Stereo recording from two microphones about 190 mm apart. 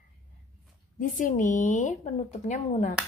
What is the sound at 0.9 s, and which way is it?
A woman's voice, 45° left (ahead or behind).